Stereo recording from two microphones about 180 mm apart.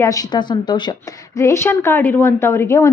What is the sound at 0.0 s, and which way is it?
A woman's voice, 20° left (ahead or behind).